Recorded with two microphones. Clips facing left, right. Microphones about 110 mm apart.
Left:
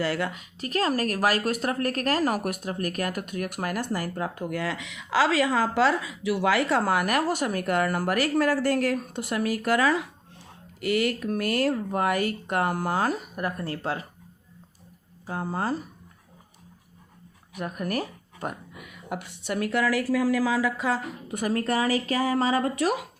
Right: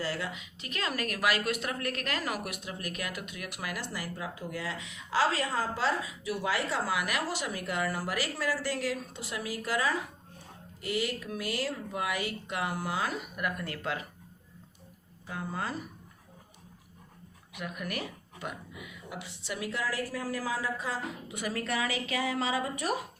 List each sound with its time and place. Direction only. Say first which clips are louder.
0.0 s speech: left 7 dB; 65° left (ahead or behind)
10.8 s speech: left 8 dB; 65° left (ahead or behind); by 14.1 s 35° left (ahead or behind)
15.3 s speech: left 7 dB; 35° left (ahead or behind)
17.5 s speech: left 7 dB; 40° left (ahead or behind); by 21.0 s 80° left
21.2 s speech: left 10 dB; 45° left (ahead or behind)